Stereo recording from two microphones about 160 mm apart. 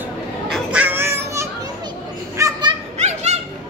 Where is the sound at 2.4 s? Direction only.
30° right (ahead or behind).